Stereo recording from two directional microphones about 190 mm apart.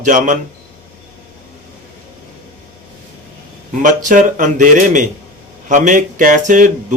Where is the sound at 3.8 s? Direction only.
40° right (ahead or behind).